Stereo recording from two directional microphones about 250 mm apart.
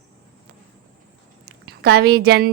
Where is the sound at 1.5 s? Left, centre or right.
Right.